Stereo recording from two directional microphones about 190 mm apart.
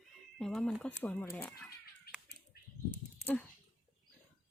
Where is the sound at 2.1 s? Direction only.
55° left (ahead or behind).